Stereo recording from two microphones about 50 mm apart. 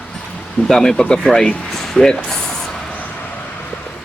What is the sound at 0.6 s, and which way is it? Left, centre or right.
Speech, centre.